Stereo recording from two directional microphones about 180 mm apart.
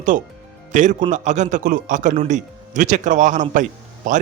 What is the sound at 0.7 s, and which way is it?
A man's voice, 45° right (ahead or behind).